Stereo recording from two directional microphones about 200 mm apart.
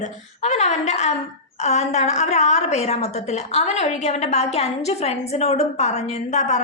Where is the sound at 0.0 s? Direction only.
35° left (ahead or behind).